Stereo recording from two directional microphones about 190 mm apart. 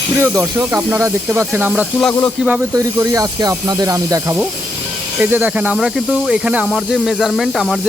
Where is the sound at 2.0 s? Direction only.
5° left (ahead or behind).